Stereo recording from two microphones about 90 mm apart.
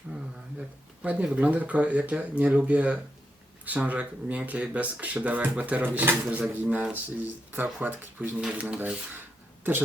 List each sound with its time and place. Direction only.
1.0 s speech: 15° right (ahead or behind)